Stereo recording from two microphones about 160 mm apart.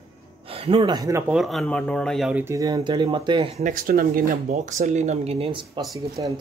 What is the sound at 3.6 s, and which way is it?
Speech, 65° right (ahead or behind).